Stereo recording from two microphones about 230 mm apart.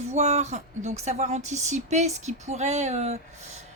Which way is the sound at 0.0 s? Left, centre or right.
Right.